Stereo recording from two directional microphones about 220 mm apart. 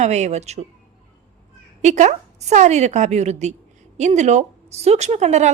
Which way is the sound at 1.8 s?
30° right (ahead or behind).